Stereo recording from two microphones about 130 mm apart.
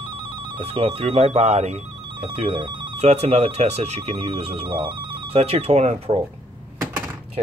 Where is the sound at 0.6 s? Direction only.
45° right (ahead or behind).